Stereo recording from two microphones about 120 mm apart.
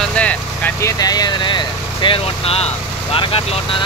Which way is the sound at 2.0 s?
50° left (ahead or behind).